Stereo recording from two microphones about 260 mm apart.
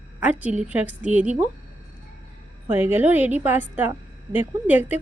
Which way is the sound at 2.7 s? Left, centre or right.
Centre.